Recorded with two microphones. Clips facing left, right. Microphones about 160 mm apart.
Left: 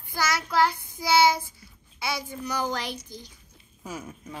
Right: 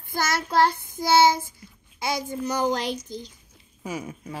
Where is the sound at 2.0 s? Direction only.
45° right (ahead or behind).